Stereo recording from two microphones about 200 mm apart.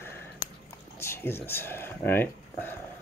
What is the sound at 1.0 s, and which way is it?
Speech, 10° left (ahead or behind).